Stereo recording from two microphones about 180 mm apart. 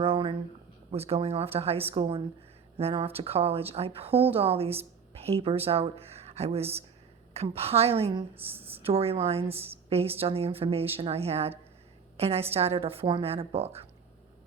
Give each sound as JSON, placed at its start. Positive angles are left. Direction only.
{"t": 0.0, "sound": "a sound", "side_deg": -30}
{"t": 0.9, "sound": "speech", "side_deg": -35}
{"t": 8.4, "sound": "speech", "side_deg": -10}
{"t": 8.8, "sound": "a woman's voice", "side_deg": -35}